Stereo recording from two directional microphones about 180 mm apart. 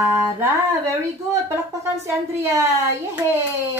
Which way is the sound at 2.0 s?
15° right (ahead or behind).